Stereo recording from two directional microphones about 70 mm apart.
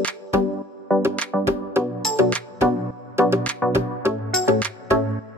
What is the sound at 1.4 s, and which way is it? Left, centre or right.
Music, right.